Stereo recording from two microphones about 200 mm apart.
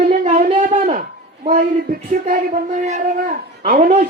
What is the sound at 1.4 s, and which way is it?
Speech, 45° right (ahead or behind).